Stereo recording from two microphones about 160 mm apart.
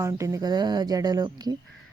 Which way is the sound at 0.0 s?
20° right (ahead or behind).